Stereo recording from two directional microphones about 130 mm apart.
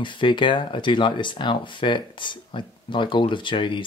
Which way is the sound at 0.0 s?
40° left (ahead or behind).